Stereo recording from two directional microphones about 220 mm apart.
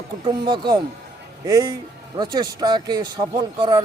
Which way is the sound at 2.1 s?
20° right (ahead or behind).